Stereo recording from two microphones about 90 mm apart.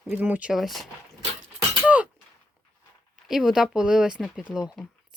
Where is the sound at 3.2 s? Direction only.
5° right (ahead or behind).